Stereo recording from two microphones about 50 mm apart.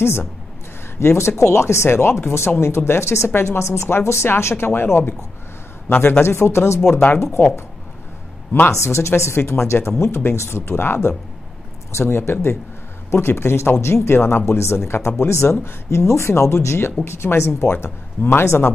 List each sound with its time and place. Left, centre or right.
0.9 s speech: left
6.2 s speech: left
8.6 s speech: left
14.5 s speech: left
15.2 s speech: left